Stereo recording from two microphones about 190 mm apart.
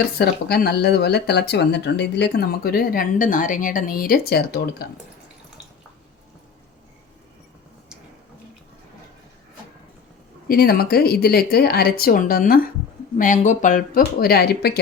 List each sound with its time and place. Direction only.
0.2 s speech: 55° left (ahead or behind)
10.5 s speech: 55° left (ahead or behind)